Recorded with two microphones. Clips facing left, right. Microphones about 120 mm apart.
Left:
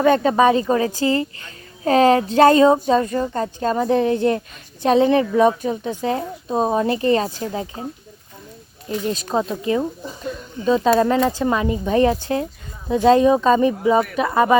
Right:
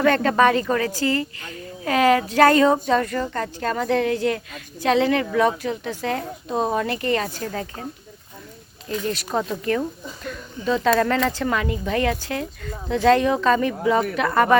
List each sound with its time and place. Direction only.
0.0 s a woman's voice: 15° left (ahead or behind)
9.0 s a woman's voice: 20° left (ahead or behind)